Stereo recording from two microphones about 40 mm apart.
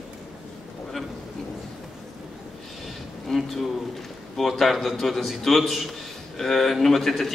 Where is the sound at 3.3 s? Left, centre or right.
Centre.